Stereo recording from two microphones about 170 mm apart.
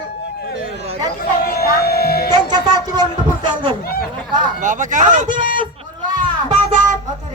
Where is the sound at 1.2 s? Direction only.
65° left (ahead or behind).